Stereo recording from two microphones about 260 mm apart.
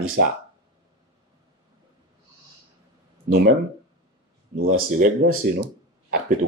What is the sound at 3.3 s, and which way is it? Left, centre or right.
Speech, right.